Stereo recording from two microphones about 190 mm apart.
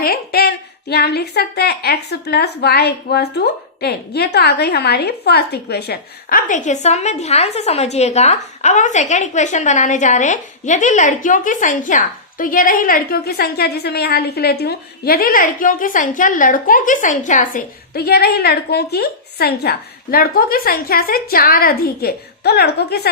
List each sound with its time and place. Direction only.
0.0 s a woman's voice: 55° left (ahead or behind)